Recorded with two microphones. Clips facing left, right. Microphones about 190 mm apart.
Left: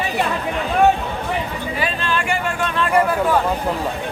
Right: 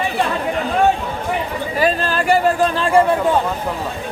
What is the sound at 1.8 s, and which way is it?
A man's voice, 40° right (ahead or behind).